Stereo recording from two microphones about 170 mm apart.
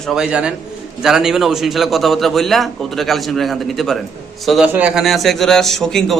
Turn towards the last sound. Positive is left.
turn(degrees=0)  # may be behind; listen again after turning